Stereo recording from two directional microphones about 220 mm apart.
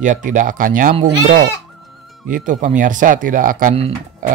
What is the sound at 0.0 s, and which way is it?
Speech, 35° right (ahead or behind).